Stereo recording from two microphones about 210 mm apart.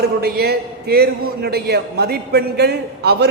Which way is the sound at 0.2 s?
50° right (ahead or behind).